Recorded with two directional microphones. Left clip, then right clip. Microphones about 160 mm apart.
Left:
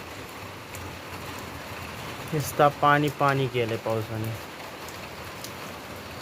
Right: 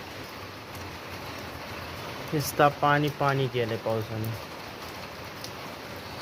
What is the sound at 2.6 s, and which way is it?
Speech, 15° left (ahead or behind).